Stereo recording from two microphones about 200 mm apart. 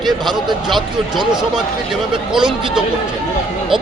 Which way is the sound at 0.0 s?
Centre (ahead or behind).